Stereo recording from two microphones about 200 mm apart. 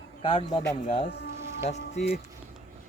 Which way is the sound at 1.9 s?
55° left (ahead or behind).